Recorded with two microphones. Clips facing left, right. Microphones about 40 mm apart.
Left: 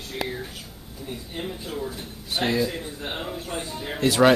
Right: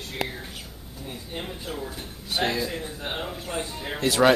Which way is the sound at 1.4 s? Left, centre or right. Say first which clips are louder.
Left 3 dB; centre.